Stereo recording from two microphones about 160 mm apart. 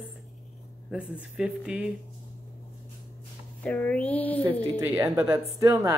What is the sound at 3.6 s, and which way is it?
Speech, 10° left (ahead or behind).